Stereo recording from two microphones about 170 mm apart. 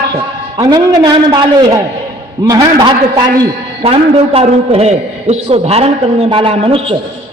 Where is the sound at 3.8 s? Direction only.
35° right (ahead or behind).